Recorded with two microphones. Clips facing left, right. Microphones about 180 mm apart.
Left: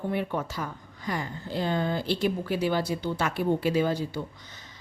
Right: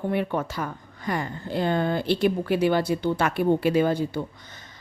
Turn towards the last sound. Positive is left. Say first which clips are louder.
# right 4 dB
turn(degrees=-55)  # may be behind; listen again after turning